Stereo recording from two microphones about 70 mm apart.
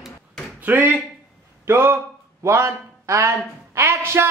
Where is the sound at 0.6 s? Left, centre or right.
Right.